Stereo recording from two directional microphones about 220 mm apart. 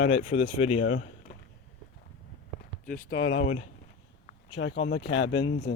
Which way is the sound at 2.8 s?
35° left (ahead or behind).